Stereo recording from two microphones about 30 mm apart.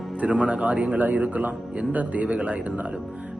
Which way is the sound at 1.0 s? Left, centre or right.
Right.